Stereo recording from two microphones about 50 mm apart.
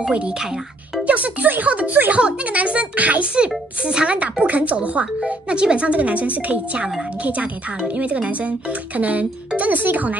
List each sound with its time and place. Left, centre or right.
0.0 s speech: centre; by 10.1 s right